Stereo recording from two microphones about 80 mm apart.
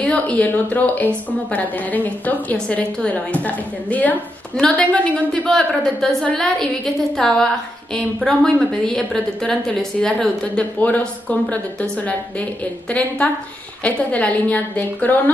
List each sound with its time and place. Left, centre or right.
0.0 s a woman's voice: centre
13.8 s a woman's voice: centre